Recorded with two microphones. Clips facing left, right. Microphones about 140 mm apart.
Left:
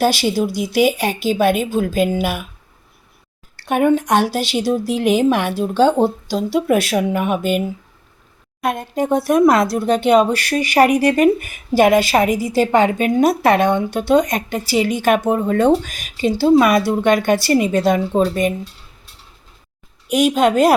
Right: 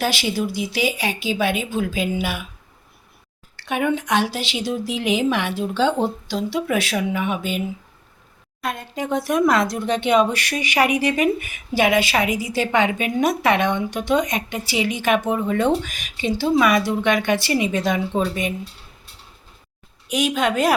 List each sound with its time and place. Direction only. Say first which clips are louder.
0.0 s a woman's voice: left 6 dB; 40° left (ahead or behind)
3.6 s a woman's voice: left 7 dB; 45° left (ahead or behind)
8.6 s speech: left 7 dB; 50° left (ahead or behind)
20.1 s speech: left 6 dB; 40° left (ahead or behind)